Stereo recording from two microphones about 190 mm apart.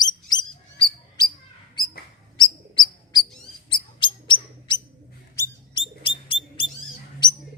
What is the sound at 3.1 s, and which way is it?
Bird, 20° left (ahead or behind).